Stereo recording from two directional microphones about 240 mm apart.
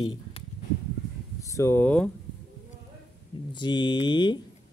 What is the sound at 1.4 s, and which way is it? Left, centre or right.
Speech, centre.